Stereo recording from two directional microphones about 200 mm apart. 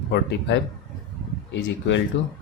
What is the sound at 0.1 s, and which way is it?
Speech, 60° left (ahead or behind).